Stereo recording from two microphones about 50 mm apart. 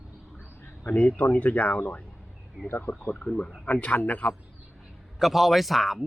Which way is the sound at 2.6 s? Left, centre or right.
Left.